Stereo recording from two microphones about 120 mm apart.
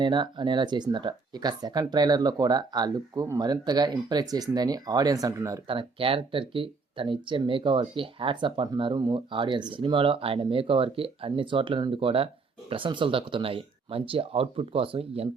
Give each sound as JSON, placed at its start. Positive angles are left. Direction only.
{"t": 0.0, "sound": "speech", "side_deg": -40}
{"t": 5.6, "sound": "speech", "side_deg": -50}